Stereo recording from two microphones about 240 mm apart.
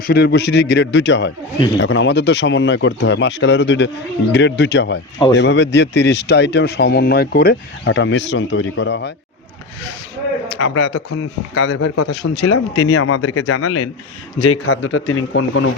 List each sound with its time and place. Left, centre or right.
0.1 s speech: left
10.6 s speech: left
11.1 s speech: left
12.2 s speech: left
12.5 s a man's voice: left